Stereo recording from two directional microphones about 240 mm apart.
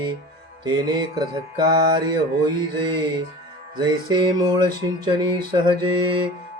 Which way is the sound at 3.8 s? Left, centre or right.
Centre.